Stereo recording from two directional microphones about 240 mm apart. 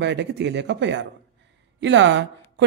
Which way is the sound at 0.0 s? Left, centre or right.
Right.